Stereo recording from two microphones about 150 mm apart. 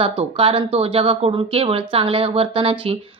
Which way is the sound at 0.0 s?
40° right (ahead or behind).